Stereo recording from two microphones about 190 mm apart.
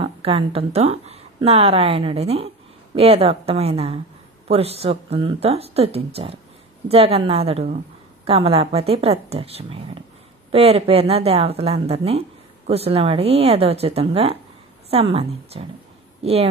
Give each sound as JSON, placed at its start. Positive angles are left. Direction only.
{"t": 0.0, "sound": "a woman's voice", "side_deg": -30}